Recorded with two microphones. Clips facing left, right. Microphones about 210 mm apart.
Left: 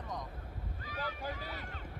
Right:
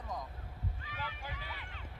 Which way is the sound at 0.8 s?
40° left (ahead or behind).